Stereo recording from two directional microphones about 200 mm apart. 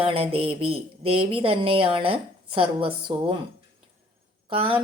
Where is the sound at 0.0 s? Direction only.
30° right (ahead or behind).